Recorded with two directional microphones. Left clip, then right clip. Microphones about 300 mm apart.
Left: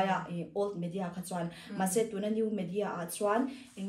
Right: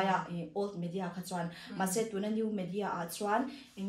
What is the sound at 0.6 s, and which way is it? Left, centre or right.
Speech, centre.